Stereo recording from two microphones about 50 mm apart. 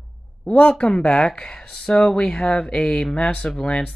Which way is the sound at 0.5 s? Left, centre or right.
Left.